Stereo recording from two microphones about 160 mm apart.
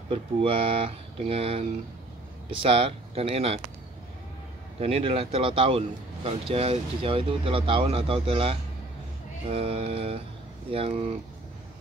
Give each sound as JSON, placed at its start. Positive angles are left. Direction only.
{"t": 0.1, "sound": "speech", "side_deg": -35}
{"t": 4.7, "sound": "speech", "side_deg": -40}